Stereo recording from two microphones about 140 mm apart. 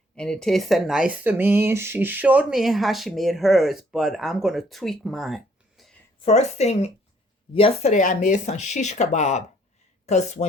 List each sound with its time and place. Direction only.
0.2 s speech: 5° left (ahead or behind)
6.2 s a woman's voice: 50° left (ahead or behind)